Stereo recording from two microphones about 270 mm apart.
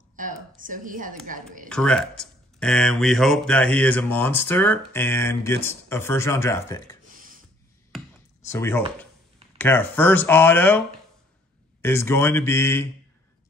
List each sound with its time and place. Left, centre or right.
0.1 s a woman's voice: right
1.7 s speech: centre
8.5 s speech: centre
11.8 s speech: centre